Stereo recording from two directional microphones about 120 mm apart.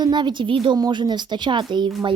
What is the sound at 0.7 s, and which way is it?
A woman's voice, 35° right (ahead or behind).